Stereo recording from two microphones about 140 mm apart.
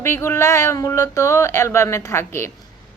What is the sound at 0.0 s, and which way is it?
A woman's voice, 20° left (ahead or behind).